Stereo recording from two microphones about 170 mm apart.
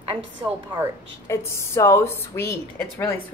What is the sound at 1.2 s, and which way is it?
A woman's voice, 15° left (ahead or behind).